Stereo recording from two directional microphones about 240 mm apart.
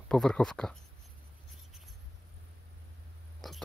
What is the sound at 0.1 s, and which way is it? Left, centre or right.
Speech, centre.